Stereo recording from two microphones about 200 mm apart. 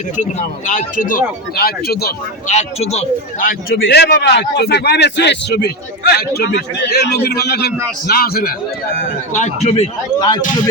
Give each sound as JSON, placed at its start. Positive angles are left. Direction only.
{"t": 0.7, "sound": "speech", "side_deg": 40}
{"t": 2.5, "sound": "speech", "side_deg": 35}
{"t": 3.8, "sound": "a man's voice", "side_deg": 55}
{"t": 9.3, "sound": "a man's voice", "side_deg": 35}